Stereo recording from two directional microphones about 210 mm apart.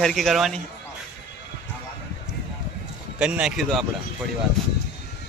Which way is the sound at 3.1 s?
5° right (ahead or behind).